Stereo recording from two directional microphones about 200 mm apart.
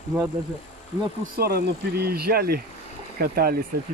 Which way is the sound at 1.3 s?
50° right (ahead or behind).